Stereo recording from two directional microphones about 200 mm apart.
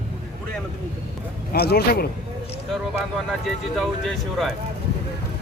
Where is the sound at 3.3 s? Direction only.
Centre (ahead or behind).